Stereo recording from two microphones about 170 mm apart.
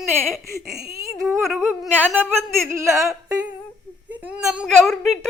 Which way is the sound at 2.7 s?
15° right (ahead or behind).